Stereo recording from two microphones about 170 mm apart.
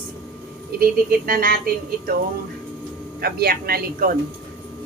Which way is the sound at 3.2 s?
65° right (ahead or behind).